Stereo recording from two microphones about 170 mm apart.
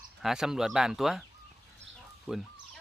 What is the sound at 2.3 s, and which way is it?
Speech, 5° right (ahead or behind).